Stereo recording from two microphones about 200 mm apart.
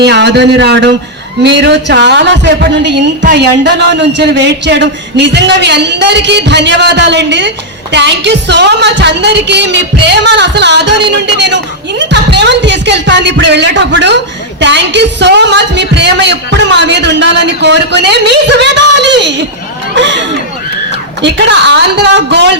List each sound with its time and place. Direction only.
0.0 s a man's voice: 60° right (ahead or behind)